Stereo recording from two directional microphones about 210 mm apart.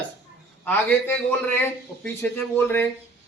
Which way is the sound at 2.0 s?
10° left (ahead or behind).